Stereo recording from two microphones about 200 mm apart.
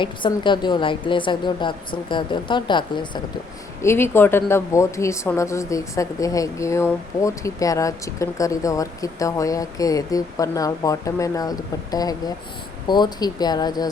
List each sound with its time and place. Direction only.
0.0 s a woman's voice: 25° left (ahead or behind)
3.8 s a woman's voice: 10° left (ahead or behind)